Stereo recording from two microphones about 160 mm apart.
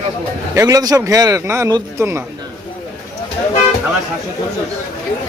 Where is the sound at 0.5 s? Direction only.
25° right (ahead or behind).